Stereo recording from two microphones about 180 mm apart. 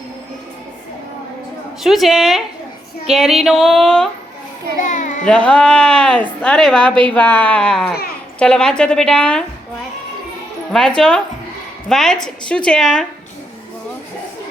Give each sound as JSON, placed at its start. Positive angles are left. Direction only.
{"t": 1.8, "sound": "a woman's voice", "side_deg": 0}
{"t": 4.8, "sound": "child singing", "side_deg": 40}
{"t": 5.2, "sound": "a woman's voice", "side_deg": 5}
{"t": 10.7, "sound": "a woman's voice", "side_deg": 5}